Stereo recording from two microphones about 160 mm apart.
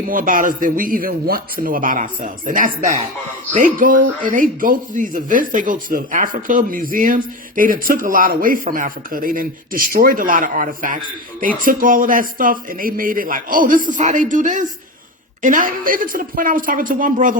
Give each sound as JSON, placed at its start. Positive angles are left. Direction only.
{"t": 0.1, "sound": "speech", "side_deg": -60}